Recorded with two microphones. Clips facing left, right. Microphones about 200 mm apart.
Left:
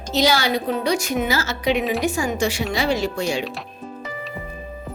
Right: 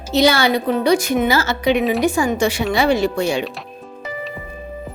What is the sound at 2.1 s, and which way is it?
A woman's voice, 60° right (ahead or behind).